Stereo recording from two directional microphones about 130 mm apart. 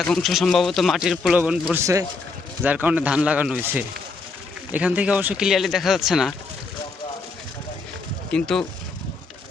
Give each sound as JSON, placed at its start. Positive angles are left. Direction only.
{"t": 0.0, "sound": "speech", "side_deg": 0}
{"t": 1.8, "sound": "a man's voice", "side_deg": -25}
{"t": 2.6, "sound": "speech", "side_deg": -10}
{"t": 4.7, "sound": "speech", "side_deg": -10}
{"t": 8.3, "sound": "speech", "side_deg": 5}